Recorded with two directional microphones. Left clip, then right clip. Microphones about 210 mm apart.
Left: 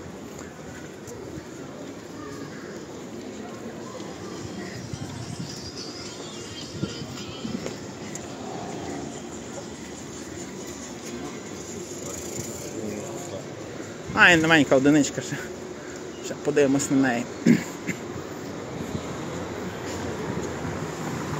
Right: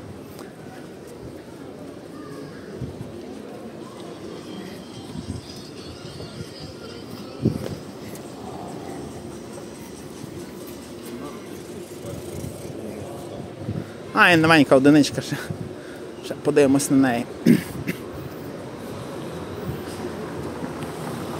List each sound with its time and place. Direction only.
14.1 s speech: 25° right (ahead or behind)